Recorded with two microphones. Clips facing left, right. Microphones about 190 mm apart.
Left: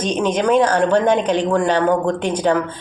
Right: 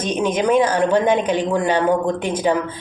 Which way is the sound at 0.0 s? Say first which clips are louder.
Left 1 dB; 10° right (ahead or behind).